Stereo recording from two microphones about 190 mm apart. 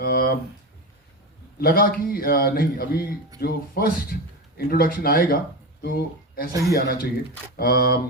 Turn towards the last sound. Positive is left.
turn(degrees=55)  # may be behind; listen again after turning